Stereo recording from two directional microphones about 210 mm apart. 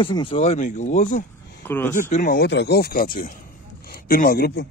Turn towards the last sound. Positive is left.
turn(degrees=50)  # may be behind; listen again after turning